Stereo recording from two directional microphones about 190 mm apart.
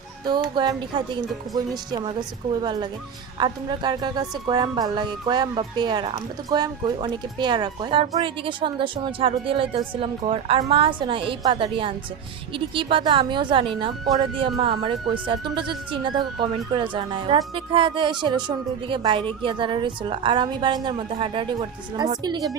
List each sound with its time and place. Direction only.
0.3 s a woman's voice: 25° right (ahead or behind)